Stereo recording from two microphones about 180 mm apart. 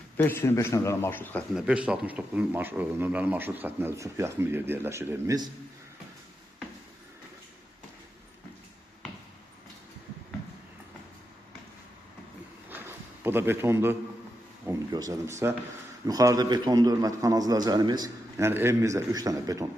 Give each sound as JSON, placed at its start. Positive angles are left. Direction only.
{"t": 0.2, "sound": "a man's voice", "side_deg": 15}
{"t": 1.5, "sound": "speech", "side_deg": -5}
{"t": 12.6, "sound": "a sound", "side_deg": -10}
{"t": 14.7, "sound": "a man's voice", "side_deg": -20}